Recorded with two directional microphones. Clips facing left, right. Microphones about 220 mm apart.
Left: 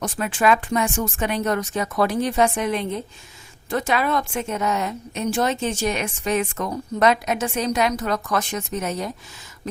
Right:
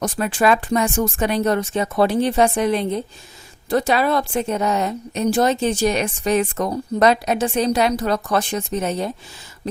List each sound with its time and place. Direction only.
0.0 s a woman's voice: 40° right (ahead or behind)